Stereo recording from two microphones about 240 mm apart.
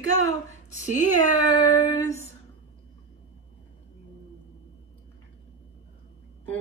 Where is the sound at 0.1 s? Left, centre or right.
Left.